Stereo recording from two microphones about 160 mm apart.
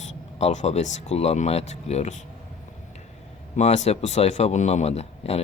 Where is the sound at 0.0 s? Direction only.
45° left (ahead or behind).